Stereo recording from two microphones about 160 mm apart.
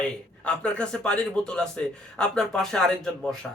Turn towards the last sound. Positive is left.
turn(degrees=0)  # may be behind; listen again after turning